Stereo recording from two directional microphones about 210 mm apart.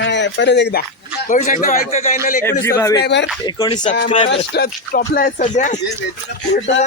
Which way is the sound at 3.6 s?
20° left (ahead or behind).